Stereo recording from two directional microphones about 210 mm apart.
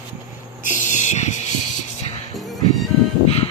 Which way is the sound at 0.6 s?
35° left (ahead or behind).